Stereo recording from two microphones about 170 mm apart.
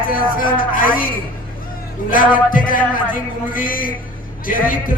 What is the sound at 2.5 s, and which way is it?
Speech, 55° left (ahead or behind).